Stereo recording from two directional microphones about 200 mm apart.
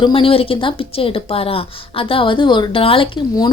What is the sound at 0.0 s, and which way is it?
Speech, 25° left (ahead or behind).